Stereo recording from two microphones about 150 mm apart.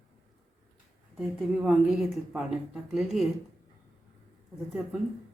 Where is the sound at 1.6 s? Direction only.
Centre (ahead or behind).